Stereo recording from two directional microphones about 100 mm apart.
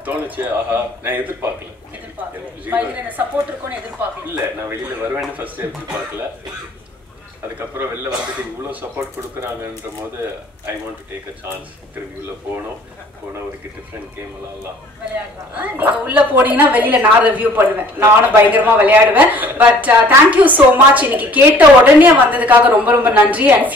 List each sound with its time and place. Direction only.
0.0 s a woman's voice: 15° right (ahead or behind)
2.7 s speech: 20° right (ahead or behind)
4.6 s speech: 20° right (ahead or behind)
8.6 s speech: 25° right (ahead or behind)
15.5 s a woman's voice: 15° right (ahead or behind)